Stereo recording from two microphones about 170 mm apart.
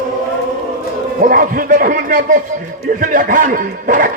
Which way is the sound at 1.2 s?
55° right (ahead or behind).